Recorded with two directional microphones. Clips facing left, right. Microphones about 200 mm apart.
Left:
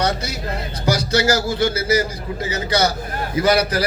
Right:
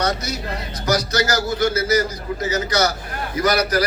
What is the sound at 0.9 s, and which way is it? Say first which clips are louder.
A man's voice: left 2 dB; 30° left (ahead or behind).